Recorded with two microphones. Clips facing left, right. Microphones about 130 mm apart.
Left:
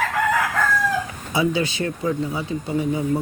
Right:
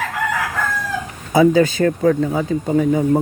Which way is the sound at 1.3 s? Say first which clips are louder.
Right 9 dB; 45° right (ahead or behind).